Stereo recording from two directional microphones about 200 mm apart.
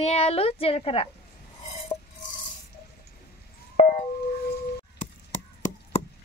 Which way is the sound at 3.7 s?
35° left (ahead or behind).